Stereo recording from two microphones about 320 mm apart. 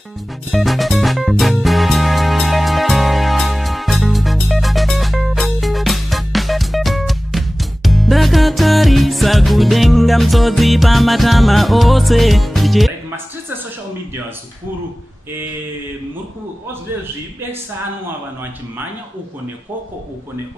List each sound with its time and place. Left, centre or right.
0.5 s music: centre